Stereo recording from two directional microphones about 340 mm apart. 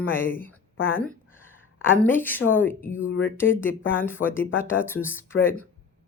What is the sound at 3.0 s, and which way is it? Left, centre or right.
Speech, left.